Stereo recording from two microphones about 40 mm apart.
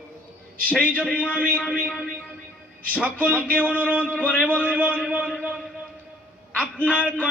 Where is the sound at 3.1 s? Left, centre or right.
Left.